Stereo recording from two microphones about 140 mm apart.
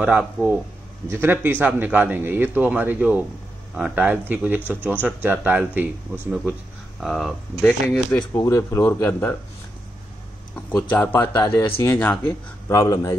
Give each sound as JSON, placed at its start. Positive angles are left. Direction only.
{"t": 0.0, "sound": "a man's voice", "side_deg": -5}
{"t": 4.6, "sound": "speech", "side_deg": 15}
{"t": 5.0, "sound": "a man's voice", "side_deg": -10}
{"t": 7.0, "sound": "speech", "side_deg": 0}
{"t": 8.3, "sound": "speech", "side_deg": 20}
{"t": 10.5, "sound": "speech", "side_deg": 10}